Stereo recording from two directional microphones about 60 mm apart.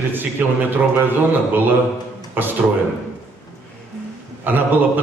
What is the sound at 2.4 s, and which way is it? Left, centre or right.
Speech, right.